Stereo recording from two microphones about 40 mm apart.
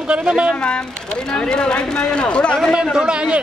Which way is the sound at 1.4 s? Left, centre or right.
Left.